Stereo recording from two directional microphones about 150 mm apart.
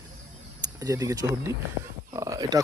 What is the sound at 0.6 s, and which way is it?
Speech, 25° right (ahead or behind).